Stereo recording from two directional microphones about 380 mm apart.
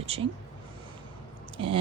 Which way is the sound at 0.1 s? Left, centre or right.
Centre.